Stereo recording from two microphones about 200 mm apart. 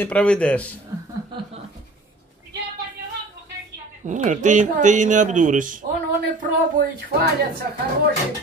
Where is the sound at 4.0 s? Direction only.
40° right (ahead or behind).